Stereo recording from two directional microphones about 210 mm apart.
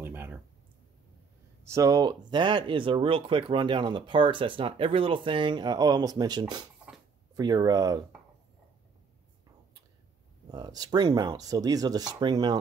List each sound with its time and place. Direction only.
0.0 s a sound: 10° right (ahead or behind)
1.7 s speech: 15° right (ahead or behind)
10.5 s speech: 20° right (ahead or behind)